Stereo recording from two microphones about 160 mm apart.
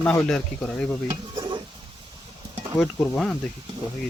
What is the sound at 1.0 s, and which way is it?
Stir, 25° right (ahead or behind).